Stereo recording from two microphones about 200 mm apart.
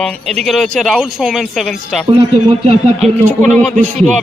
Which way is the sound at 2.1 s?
25° right (ahead or behind).